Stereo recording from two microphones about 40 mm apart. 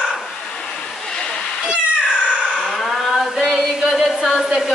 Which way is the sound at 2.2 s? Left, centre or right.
Right.